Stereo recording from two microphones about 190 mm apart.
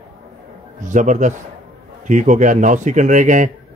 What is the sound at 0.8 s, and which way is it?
A man's voice, 40° right (ahead or behind).